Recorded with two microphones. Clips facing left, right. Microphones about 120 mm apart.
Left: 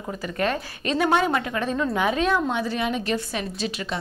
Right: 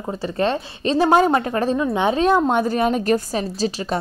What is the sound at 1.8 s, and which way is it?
A woman's voice, 25° right (ahead or behind).